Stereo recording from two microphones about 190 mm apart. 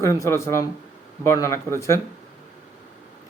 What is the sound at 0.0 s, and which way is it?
A man's voice, 15° left (ahead or behind).